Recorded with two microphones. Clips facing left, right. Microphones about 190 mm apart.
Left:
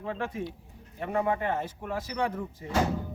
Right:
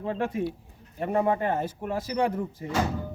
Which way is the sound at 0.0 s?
35° right (ahead or behind).